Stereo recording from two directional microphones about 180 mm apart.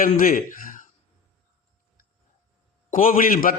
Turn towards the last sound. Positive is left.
turn(degrees=50)  # may be behind; listen again after turning